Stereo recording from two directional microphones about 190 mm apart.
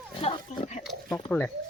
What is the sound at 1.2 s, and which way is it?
Speech, 10° left (ahead or behind).